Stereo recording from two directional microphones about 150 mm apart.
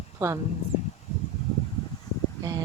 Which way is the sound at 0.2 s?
15° right (ahead or behind).